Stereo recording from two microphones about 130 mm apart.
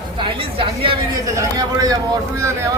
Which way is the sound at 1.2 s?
25° right (ahead or behind).